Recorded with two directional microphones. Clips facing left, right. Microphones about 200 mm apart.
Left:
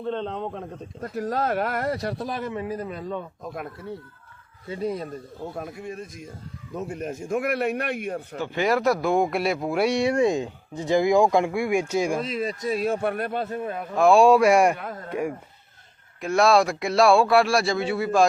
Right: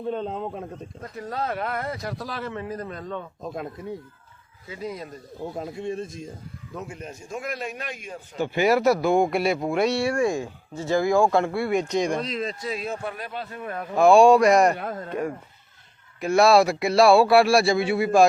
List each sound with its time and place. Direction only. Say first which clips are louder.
0.0 s speech: even; 10° right (ahead or behind)
1.2 s speech: left 4 dB; 45° left (ahead or behind)
2.2 s speech: left 3 dB; 15° left (ahead or behind)
3.4 s speech: right 2 dB; 25° right (ahead or behind)
5.4 s speech: right 4 dB; 20° right (ahead or behind)
6.8 s a man's voice: left 7 dB; 45° left (ahead or behind); by 8.4 s 60° left (ahead or behind)
8.4 s speech: right 3 dB; 10° right (ahead or behind)
13.0 s a man's voice: left 7 dB; 60° left (ahead or behind)
13.9 s speech: right 2 dB; centre (ahead or behind)
16.2 s speech: right 2 dB; 5° right (ahead or behind)